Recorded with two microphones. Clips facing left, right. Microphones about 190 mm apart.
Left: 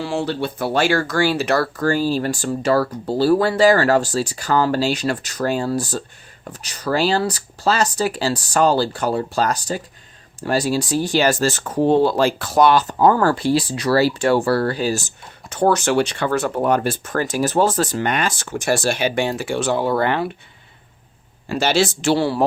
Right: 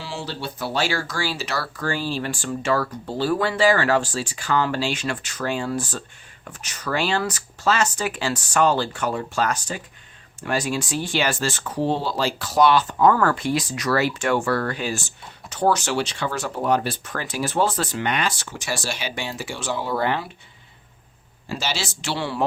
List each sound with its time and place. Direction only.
0.0 s speech: 55° left (ahead or behind)
21.5 s speech: 60° left (ahead or behind); by 22.4 s 40° left (ahead or behind)